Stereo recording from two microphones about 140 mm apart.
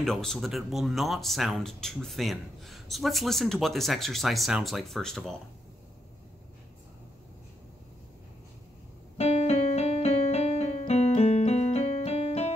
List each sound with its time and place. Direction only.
0.0 s speech: 5° left (ahead or behind)
9.2 s keyboard: 50° left (ahead or behind)